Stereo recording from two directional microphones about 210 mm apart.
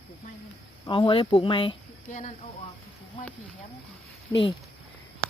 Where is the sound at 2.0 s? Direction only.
35° left (ahead or behind).